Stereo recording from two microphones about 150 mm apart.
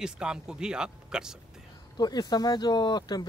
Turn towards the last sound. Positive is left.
turn(degrees=25)  # may be behind; listen again after turning